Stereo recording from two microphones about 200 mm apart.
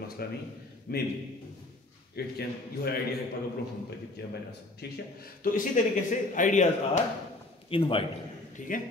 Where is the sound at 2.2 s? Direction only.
55° left (ahead or behind).